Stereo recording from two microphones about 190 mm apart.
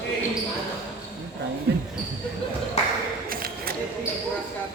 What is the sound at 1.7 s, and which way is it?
Speech, 60° right (ahead or behind).